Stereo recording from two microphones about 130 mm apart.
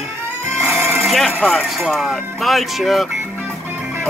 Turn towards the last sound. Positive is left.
turn(degrees=0)  # may be behind; listen again after turning